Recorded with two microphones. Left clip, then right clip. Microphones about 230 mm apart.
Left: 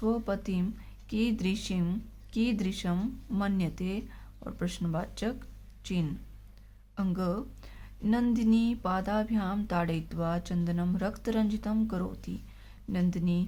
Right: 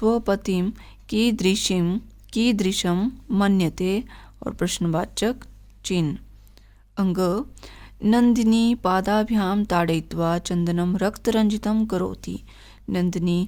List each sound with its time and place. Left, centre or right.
0.0 s a woman's voice: right